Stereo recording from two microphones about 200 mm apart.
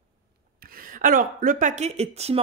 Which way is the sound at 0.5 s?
45° right (ahead or behind).